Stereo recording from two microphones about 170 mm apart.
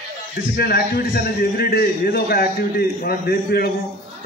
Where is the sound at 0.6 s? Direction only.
65° left (ahead or behind).